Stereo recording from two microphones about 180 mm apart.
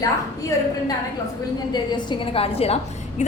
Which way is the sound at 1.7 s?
25° left (ahead or behind).